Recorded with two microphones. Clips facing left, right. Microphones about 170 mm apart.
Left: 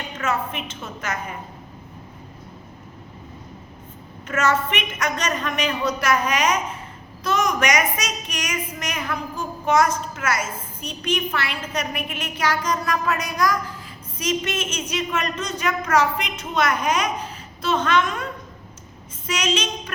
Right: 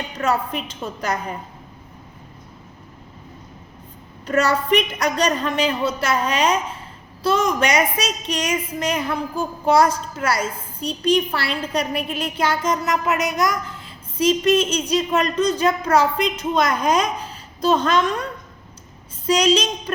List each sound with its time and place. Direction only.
0.2 s a woman's voice: 35° right (ahead or behind)
4.3 s a woman's voice: 35° right (ahead or behind)
19.3 s a woman's voice: 35° right (ahead or behind)